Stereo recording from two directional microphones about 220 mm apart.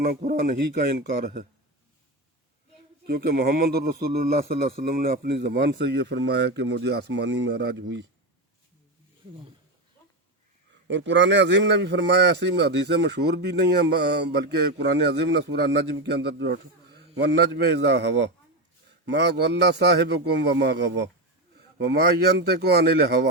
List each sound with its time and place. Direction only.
0.0 s speech: 40° right (ahead or behind)
3.1 s a man's voice: 45° right (ahead or behind)
10.8 s a man's voice: 55° right (ahead or behind)